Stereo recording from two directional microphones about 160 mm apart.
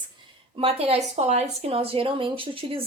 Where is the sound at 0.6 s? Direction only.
40° right (ahead or behind).